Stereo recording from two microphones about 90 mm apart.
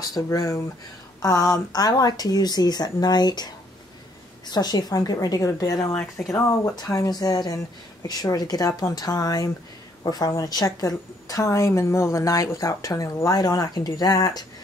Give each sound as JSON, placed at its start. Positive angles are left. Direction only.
{"t": 0.0, "sound": "speech", "side_deg": 45}
{"t": 5.9, "sound": "speech", "side_deg": 5}
{"t": 6.7, "sound": "a woman's voice", "side_deg": 45}